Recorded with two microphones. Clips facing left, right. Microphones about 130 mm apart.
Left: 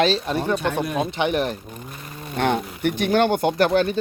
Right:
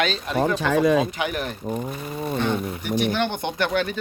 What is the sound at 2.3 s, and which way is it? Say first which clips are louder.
Speech: left 4 dB; 65° left (ahead or behind).